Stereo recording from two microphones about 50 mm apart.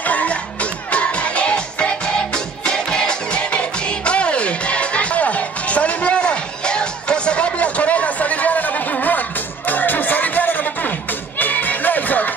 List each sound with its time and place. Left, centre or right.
0.0 s music: left